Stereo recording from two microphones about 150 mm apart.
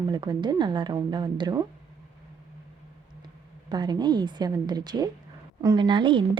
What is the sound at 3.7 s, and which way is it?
Speech, 30° right (ahead or behind).